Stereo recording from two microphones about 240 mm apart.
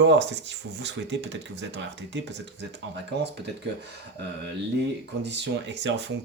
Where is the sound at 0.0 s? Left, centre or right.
Right.